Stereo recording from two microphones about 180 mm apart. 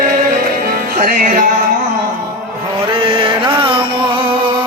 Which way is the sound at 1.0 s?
50° right (ahead or behind).